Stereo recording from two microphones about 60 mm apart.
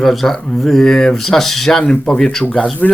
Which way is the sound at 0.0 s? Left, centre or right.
Centre.